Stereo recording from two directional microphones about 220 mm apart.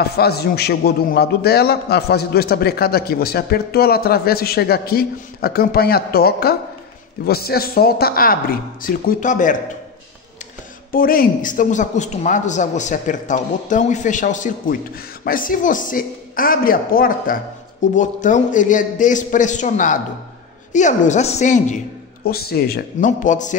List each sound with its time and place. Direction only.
0.0 s a man's voice: 45° left (ahead or behind)
10.9 s a man's voice: 40° left (ahead or behind)
22.2 s a man's voice: 45° left (ahead or behind)